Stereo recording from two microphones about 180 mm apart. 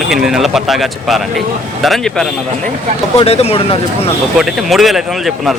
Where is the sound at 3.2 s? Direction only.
35° left (ahead or behind).